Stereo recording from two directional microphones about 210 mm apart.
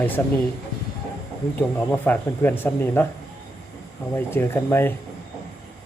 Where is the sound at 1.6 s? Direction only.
10° left (ahead or behind).